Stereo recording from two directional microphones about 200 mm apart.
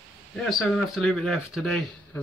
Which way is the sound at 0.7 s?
5° left (ahead or behind).